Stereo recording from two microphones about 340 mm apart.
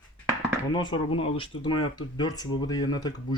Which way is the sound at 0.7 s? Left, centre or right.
Centre.